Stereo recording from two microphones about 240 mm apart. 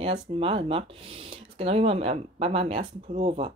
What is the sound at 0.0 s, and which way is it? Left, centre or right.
Speech, right.